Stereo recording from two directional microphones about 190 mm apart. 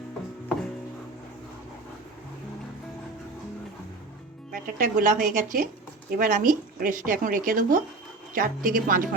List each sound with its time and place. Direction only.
4.5 s speech: 45° right (ahead or behind)